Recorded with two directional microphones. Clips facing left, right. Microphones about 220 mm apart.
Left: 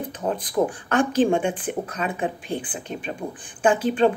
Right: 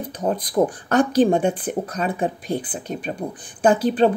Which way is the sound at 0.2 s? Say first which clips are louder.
Right 3 dB; 35° right (ahead or behind).